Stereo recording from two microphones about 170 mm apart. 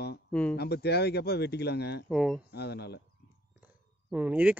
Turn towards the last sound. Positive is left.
turn(degrees=-10)  # may be behind; listen again after turning